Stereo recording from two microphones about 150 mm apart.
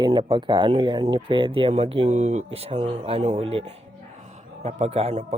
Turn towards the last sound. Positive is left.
turn(degrees=-45)  # may be behind; listen again after turning